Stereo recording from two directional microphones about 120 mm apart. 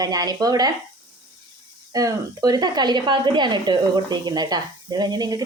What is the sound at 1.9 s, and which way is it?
Speech, 30° right (ahead or behind).